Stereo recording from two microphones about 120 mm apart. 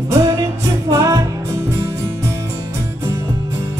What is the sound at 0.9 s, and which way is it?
Music, 30° right (ahead or behind).